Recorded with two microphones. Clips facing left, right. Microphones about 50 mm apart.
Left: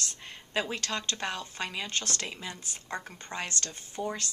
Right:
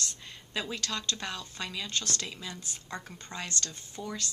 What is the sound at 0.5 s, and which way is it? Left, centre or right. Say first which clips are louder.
Speech: left 3 dB; left.